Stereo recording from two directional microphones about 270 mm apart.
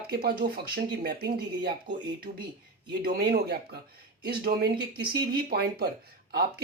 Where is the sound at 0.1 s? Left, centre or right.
Right.